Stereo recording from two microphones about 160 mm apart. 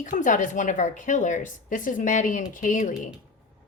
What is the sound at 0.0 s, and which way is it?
Speech, 55° left (ahead or behind).